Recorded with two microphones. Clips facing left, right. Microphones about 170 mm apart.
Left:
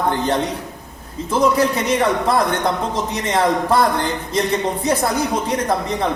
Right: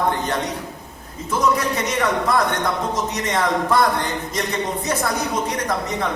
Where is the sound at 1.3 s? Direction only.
30° left (ahead or behind).